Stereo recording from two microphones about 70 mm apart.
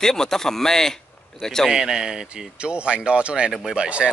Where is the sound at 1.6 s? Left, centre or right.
Centre.